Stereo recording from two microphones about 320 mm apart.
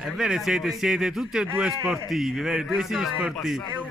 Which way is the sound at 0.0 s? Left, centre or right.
Centre.